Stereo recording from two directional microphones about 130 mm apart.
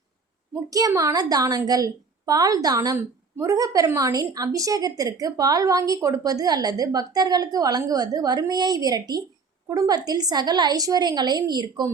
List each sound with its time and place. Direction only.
0.7 s a woman's voice: 30° right (ahead or behind)